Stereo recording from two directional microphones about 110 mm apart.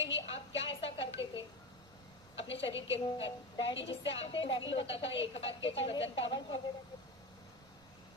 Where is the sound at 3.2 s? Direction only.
55° left (ahead or behind).